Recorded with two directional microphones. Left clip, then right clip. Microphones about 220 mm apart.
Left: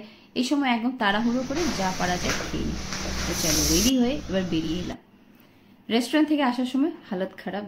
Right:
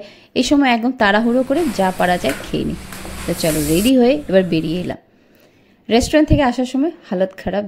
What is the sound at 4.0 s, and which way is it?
A woman's voice, 35° right (ahead or behind).